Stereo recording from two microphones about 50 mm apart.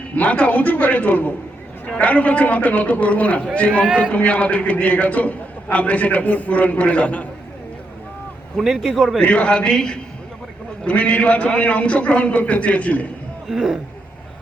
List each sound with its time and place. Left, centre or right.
0.2 s a man's voice: left
8.5 s speech: centre
9.2 s a man's voice: left
13.5 s speech: centre